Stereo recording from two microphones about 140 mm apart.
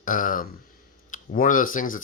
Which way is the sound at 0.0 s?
75° left (ahead or behind).